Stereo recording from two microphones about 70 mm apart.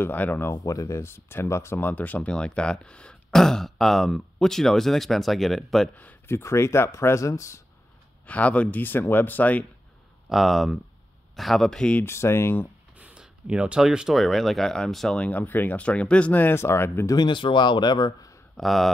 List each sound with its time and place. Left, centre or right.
0.0 s speech: left
0.7 s speech: left
1.8 s speech: left; by 5.9 s centre
6.2 s speech: left
8.3 s speech: left
10.3 s speech: centre
12.0 s speech: left
12.9 s a sound: centre
13.7 s speech: centre
15.1 s speech: left
16.5 s speech: left
17.0 s a man's voice: left
18.6 s speech: centre